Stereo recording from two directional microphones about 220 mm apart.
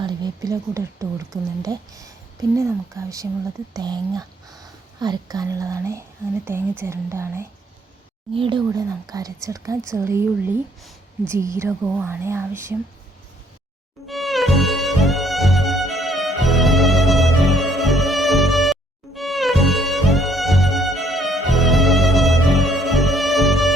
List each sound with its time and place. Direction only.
0.0 s speech: 20° right (ahead or behind)
14.1 s music: centre (ahead or behind)